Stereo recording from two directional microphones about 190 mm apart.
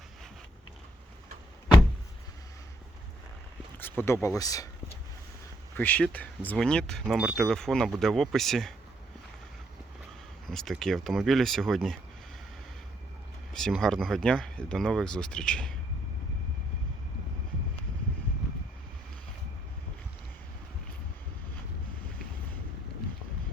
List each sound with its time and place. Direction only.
3.8 s speech: 10° left (ahead or behind)
5.7 s speech: 10° left (ahead or behind)
10.4 s speech: centre (ahead or behind)
13.5 s speech: 5° left (ahead or behind)